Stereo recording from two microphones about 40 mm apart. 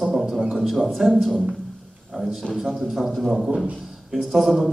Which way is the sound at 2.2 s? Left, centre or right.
Left.